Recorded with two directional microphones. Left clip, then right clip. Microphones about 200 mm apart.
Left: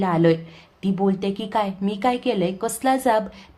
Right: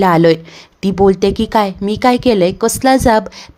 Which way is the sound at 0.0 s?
40° right (ahead or behind).